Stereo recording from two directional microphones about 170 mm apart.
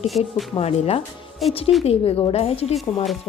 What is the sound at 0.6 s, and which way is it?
Speech, 40° left (ahead or behind).